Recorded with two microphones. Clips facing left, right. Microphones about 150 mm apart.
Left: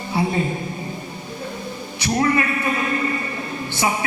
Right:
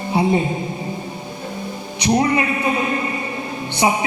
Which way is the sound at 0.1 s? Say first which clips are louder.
Right 4 dB; 20° right (ahead or behind).